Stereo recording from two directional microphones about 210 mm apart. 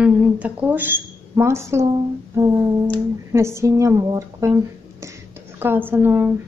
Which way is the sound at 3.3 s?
15° right (ahead or behind).